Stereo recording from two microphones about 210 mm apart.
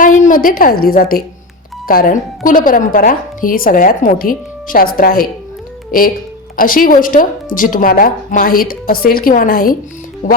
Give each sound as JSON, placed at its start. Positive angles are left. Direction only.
{"t": 0.0, "sound": "a woman's voice", "side_deg": 40}
{"t": 6.6, "sound": "a woman's voice", "side_deg": 40}
{"t": 10.2, "sound": "music", "side_deg": 35}